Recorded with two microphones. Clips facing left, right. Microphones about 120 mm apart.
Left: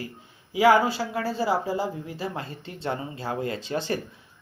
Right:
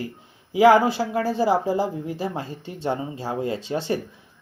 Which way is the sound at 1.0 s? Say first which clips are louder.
Right 4 dB; 40° right (ahead or behind).